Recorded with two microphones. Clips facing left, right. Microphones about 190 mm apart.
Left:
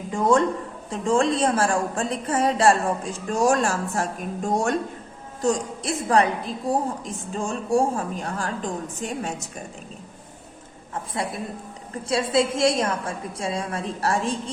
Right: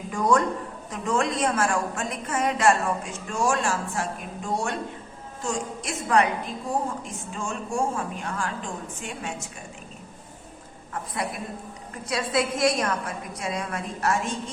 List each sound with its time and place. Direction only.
0.1 s a woman's voice: 25° left (ahead or behind)
12.0 s a woman's voice: 25° left (ahead or behind)